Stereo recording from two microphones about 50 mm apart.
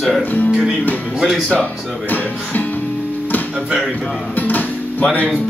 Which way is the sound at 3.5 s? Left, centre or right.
Centre.